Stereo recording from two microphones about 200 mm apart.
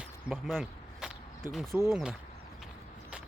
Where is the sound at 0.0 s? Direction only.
Centre (ahead or behind).